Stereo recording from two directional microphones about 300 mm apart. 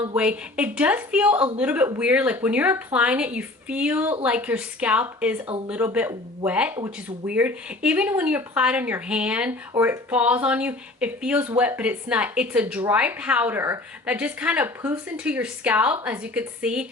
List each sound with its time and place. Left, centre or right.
0.0 s speech: centre